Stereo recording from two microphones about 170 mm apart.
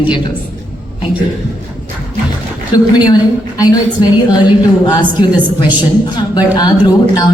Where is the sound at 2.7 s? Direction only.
25° left (ahead or behind).